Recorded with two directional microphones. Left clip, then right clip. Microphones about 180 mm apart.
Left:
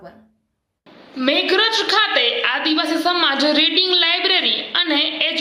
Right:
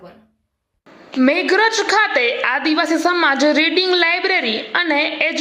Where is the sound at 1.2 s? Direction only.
55° right (ahead or behind).